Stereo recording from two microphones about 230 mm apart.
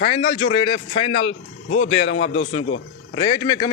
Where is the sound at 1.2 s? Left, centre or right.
Left.